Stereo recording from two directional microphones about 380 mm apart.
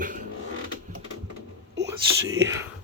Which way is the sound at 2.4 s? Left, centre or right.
Centre.